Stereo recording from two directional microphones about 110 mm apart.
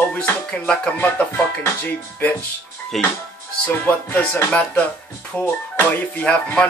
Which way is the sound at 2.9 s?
Centre (ahead or behind).